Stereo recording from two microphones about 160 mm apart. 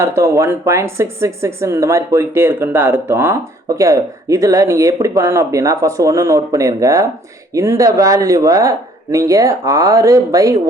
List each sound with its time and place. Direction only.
0.0 s speech: 20° right (ahead or behind)